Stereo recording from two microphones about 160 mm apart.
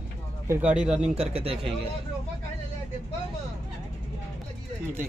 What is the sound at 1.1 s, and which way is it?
Speech, 40° right (ahead or behind).